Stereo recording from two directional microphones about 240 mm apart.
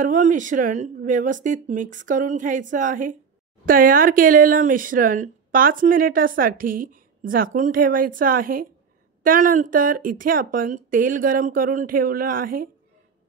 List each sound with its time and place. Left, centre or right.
0.0 s speech: right